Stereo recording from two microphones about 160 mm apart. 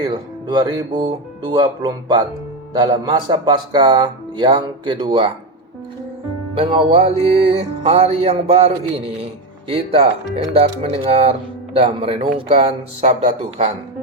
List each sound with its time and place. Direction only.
0.0 s speech: 30° right (ahead or behind)
6.6 s speech: 35° right (ahead or behind)